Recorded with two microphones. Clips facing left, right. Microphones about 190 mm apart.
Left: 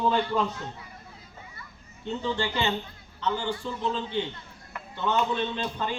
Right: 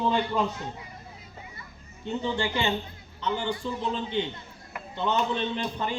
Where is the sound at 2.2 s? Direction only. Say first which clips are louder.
Even; 15° right (ahead or behind).